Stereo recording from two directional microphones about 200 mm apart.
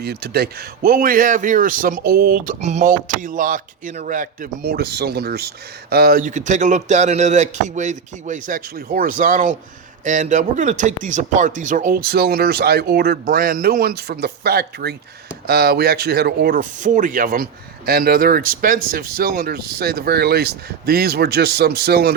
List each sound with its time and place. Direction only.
0.0 s a man's voice: 55° right (ahead or behind)